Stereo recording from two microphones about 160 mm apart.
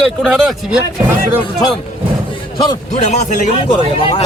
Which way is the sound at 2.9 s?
45° left (ahead or behind).